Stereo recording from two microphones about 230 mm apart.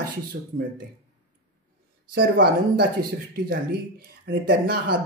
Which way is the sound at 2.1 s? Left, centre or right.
Right.